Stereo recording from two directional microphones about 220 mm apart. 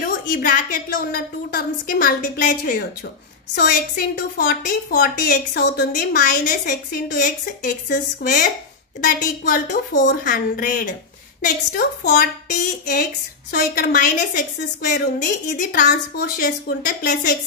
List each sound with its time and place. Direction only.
0.0 s a woman's voice: 40° left (ahead or behind)